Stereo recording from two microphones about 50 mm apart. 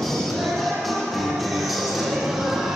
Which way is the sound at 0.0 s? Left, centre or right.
Centre.